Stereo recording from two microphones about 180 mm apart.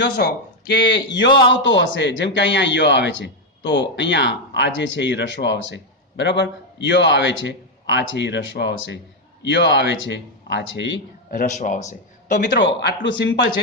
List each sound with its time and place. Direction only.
0.0 s speech: 65° left (ahead or behind)
1.6 s a man's voice: 85° left
11.3 s a man's voice: 45° left (ahead or behind)
12.5 s a man's voice: 75° left (ahead or behind)